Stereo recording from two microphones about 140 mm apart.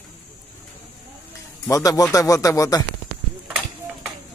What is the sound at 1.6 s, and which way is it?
Speech, 25° left (ahead or behind).